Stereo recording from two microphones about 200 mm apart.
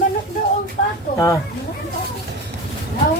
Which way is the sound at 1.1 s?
15° left (ahead or behind).